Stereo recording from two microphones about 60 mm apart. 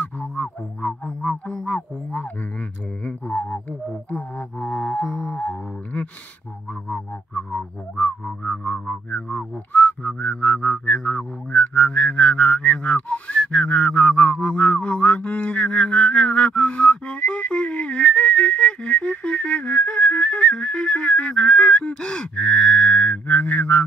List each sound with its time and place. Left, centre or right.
0.2 s music: left
1.3 s speech: centre
3.0 s music: left
5.4 s speech: centre
6.9 s music: left
9.7 s whistling: left
13.5 s a sound: centre
23.2 s music: left